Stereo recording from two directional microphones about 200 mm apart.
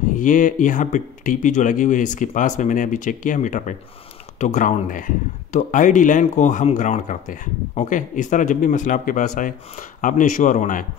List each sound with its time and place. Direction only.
0.2 s speech: 40° left (ahead or behind)